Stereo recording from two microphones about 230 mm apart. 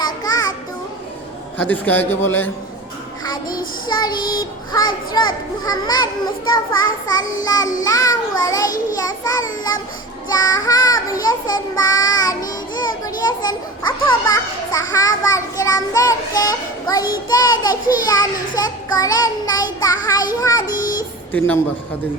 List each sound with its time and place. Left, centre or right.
0.0 s a sound: centre
1.5 s child singing: centre
3.8 s a child's voice: centre
5.6 s child singing: centre